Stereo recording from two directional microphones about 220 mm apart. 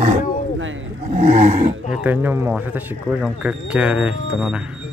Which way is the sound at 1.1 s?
30° right (ahead or behind).